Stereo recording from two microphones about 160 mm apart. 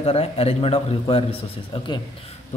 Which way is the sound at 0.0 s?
40° left (ahead or behind).